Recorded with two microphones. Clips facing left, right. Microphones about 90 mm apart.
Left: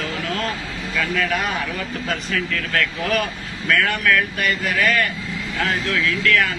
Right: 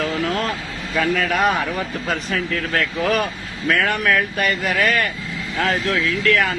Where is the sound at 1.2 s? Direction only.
45° right (ahead or behind).